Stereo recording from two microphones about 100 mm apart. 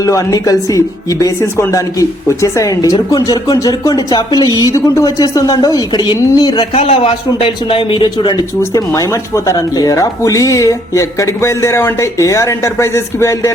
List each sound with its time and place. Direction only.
0.0 s a woman's voice: 35° left (ahead or behind)
6.7 s a man's voice: 80° left; by 8.4 s 50° left (ahead or behind)
8.7 s a woman's voice: 30° left (ahead or behind)